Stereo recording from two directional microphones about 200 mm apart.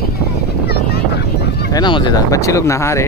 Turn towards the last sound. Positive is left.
turn(degrees=15)  # may be behind; listen again after turning